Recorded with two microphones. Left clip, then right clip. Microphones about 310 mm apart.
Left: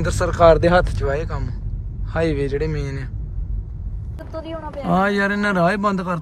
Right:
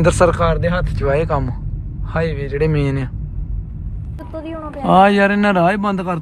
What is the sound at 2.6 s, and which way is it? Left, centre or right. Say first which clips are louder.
Speech: right 8 dB; centre.